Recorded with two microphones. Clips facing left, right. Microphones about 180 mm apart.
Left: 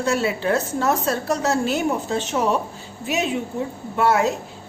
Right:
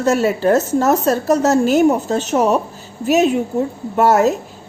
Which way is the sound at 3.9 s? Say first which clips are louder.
Right 6 dB; 40° right (ahead or behind).